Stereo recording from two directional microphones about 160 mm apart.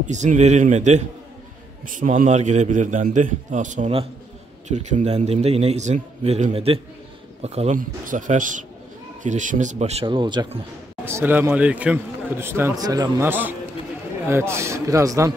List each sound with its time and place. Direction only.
0.0 s a man's voice: 50° right (ahead or behind)
7.7 s a man's voice: 55° right (ahead or behind); by 10.6 s 30° right (ahead or behind)
11.1 s speech: 15° right (ahead or behind)